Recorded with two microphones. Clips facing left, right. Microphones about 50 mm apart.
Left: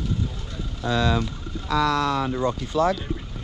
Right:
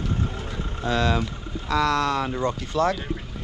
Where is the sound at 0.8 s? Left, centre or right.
Right.